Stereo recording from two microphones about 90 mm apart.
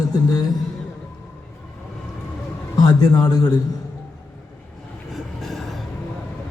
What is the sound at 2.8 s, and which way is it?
Speech, 50° left (ahead or behind).